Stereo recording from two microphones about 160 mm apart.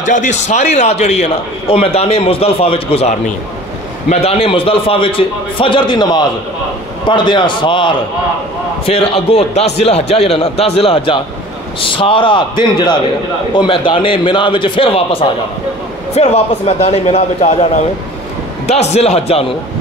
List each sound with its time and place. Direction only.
0.0 s a man's voice: 50° left (ahead or behind)
18.7 s a man's voice: 45° left (ahead or behind)